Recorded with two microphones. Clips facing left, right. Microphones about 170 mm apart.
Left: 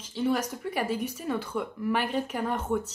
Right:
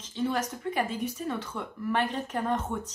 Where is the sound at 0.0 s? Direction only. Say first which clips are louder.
Left 2 dB; 10° left (ahead or behind).